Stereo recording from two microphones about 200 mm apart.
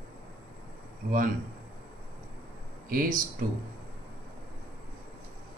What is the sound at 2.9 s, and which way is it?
Speech, 45° right (ahead or behind).